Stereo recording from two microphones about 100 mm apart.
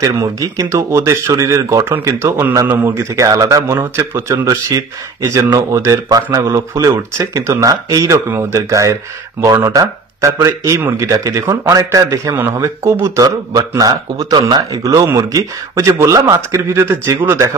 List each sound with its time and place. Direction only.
0.0 s a man's voice: 35° right (ahead or behind)